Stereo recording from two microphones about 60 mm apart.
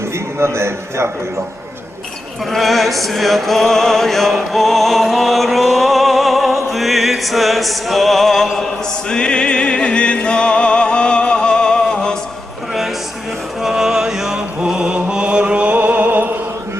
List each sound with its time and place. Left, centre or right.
0.3 s a man's voice: right
2.5 s music: centre
9.0 s music: centre
13.6 s music: centre; by 16.3 s right